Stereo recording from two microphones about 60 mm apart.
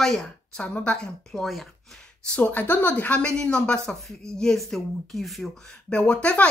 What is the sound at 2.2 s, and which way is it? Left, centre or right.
A woman's voice, centre.